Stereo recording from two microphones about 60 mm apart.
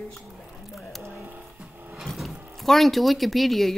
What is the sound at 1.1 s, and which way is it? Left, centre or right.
Bird, right.